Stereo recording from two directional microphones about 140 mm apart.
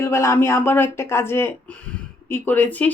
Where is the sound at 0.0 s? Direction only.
20° left (ahead or behind).